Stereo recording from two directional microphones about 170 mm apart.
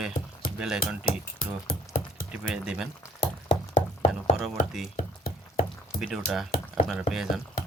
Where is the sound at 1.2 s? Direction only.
60° left (ahead or behind).